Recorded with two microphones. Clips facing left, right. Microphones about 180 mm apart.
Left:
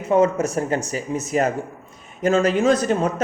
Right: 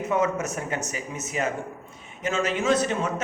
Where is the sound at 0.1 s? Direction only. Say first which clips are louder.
Left 8 dB; 30° left (ahead or behind).